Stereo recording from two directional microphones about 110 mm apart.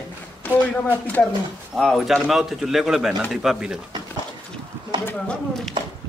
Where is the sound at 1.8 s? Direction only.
Centre (ahead or behind).